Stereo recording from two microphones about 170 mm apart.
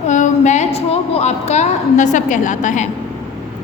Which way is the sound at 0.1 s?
45° left (ahead or behind).